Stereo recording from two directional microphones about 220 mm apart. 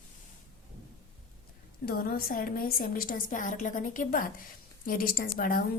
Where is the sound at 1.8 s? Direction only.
40° left (ahead or behind).